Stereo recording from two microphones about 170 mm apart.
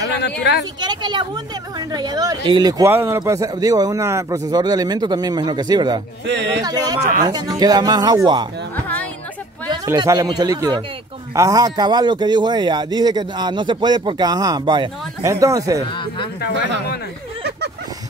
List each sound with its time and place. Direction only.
0.2 s speech: 90° left
0.7 s speech: 25° right (ahead or behind)
2.9 s speech: 15° right (ahead or behind)
6.2 s speech: 90° right
6.6 s speech: 20° right (ahead or behind)
9.8 s speech: 20° right (ahead or behind)
17.4 s a sound: 80° right